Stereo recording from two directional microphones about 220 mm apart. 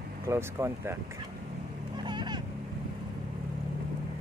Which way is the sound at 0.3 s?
10° right (ahead or behind).